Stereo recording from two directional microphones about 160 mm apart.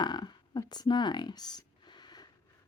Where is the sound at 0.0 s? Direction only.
25° left (ahead or behind).